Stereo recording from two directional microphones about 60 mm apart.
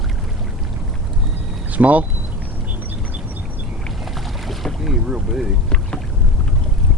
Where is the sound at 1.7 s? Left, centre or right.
Right.